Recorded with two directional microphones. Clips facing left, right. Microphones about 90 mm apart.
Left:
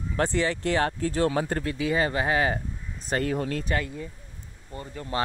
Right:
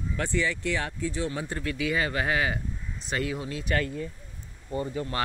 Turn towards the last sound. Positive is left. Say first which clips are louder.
# right 7 dB
turn(degrees=-5)  # may be behind; listen again after turning